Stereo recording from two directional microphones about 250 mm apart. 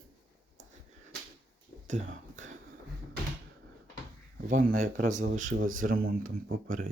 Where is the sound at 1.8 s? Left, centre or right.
Right.